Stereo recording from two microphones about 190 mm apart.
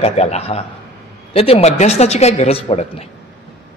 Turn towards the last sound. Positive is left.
turn(degrees=30)  # may be behind; listen again after turning